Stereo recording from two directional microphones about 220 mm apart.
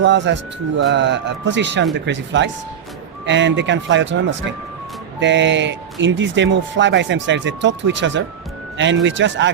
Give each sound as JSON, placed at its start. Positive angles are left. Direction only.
{"t": 0.0, "sound": "a man's voice", "side_deg": -55}